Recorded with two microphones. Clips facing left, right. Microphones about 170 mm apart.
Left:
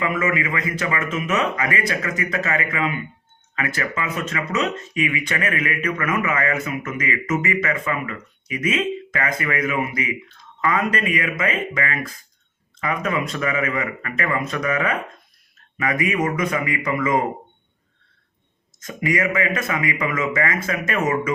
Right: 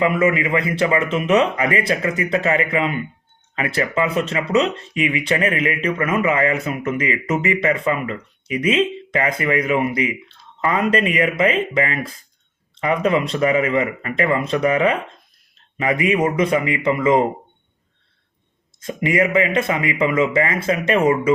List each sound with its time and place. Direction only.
0.0 s speech: 30° right (ahead or behind)
19.0 s speech: 30° right (ahead or behind)